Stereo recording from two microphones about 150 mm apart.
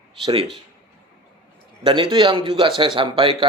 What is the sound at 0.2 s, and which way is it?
Speech, 35° right (ahead or behind).